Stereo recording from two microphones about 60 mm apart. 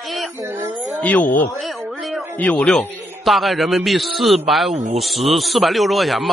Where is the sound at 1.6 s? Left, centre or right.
Centre.